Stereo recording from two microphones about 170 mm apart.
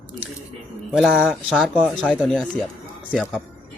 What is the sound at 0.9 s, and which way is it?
Speech, 5° right (ahead or behind).